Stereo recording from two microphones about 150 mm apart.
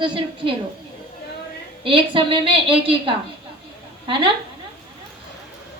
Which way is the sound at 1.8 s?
35° right (ahead or behind).